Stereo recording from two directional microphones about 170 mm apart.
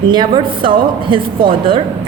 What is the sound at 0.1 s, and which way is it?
A woman's voice, 25° right (ahead or behind).